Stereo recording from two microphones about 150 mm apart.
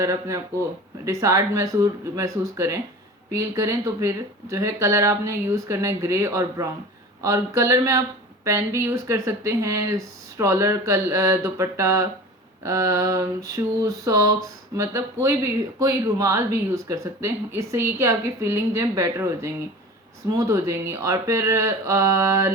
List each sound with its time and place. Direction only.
0.0 s speech: 20° right (ahead or behind)